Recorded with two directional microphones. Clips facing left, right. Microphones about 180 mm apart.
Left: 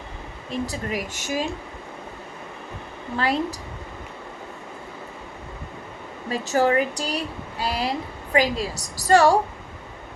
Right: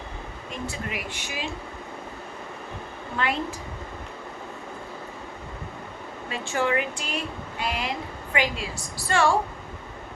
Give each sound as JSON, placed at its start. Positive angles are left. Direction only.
{"t": 0.5, "sound": "a woman's voice", "side_deg": 35}
{"t": 3.2, "sound": "a woman's voice", "side_deg": 35}
{"t": 6.3, "sound": "a woman's voice", "side_deg": 40}